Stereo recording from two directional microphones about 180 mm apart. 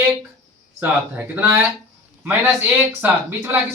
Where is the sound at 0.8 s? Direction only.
10° right (ahead or behind).